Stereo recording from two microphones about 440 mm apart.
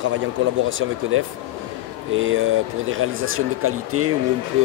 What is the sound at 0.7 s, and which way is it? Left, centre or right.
Speech, right.